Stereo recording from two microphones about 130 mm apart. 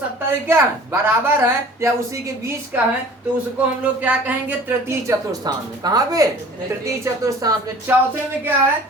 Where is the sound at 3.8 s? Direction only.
10° right (ahead or behind).